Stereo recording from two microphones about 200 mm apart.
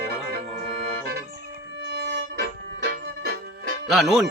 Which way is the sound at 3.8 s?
Centre (ahead or behind).